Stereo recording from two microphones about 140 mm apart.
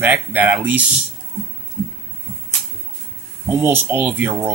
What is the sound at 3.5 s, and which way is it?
Speech, 15° right (ahead or behind).